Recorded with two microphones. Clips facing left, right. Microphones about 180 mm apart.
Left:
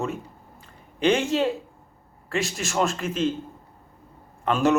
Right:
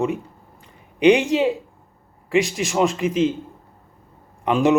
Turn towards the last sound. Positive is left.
turn(degrees=-15)  # may be behind; listen again after turning